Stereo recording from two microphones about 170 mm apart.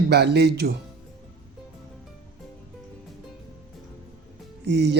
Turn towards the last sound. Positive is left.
turn(degrees=-90)